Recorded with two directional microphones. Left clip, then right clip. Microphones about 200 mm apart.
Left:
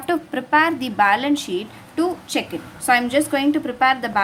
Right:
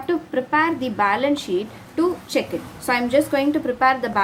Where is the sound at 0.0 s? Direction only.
30° left (ahead or behind).